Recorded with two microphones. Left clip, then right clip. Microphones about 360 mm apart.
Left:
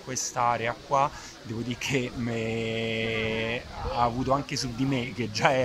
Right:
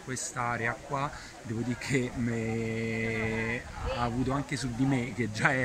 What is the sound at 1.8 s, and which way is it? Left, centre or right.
Speech, left.